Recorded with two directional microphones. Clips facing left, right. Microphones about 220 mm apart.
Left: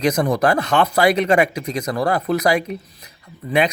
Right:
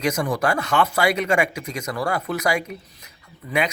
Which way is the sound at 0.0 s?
35° left (ahead or behind).